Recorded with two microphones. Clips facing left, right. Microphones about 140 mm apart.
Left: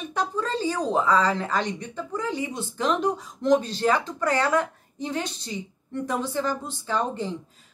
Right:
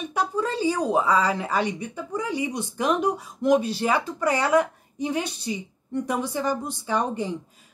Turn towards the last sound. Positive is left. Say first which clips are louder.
# right 1 dB
turn(degrees=-15)  # may be behind; listen again after turning